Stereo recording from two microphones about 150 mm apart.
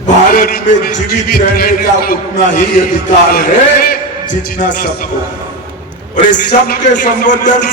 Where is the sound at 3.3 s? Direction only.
75° left (ahead or behind).